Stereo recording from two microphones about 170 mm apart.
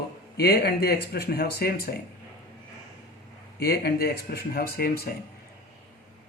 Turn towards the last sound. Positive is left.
turn(degrees=65)  # may be behind; listen again after turning